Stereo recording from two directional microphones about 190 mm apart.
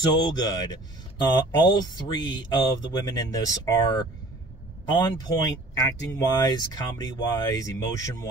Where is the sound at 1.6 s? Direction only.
25° left (ahead or behind).